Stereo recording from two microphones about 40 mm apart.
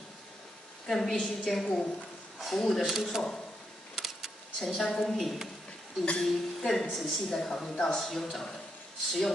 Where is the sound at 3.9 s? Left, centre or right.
Centre.